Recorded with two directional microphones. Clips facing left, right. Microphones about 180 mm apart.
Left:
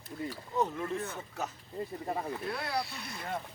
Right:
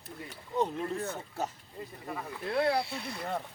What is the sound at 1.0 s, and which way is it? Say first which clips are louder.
Speech: right 3 dB; 30° right (ahead or behind).